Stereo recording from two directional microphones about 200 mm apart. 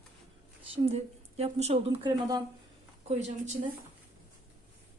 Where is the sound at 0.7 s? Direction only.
30° right (ahead or behind).